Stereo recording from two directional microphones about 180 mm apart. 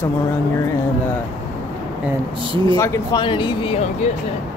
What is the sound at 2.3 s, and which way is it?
Speech, 30° right (ahead or behind).